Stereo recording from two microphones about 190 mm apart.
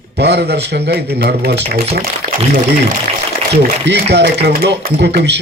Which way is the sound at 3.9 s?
65° right (ahead or behind).